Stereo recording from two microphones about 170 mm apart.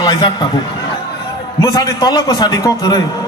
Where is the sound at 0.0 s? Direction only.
25° left (ahead or behind).